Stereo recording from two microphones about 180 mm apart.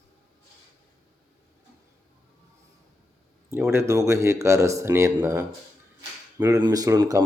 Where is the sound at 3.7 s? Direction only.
15° right (ahead or behind).